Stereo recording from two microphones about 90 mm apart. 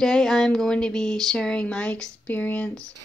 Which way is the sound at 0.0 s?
5° left (ahead or behind).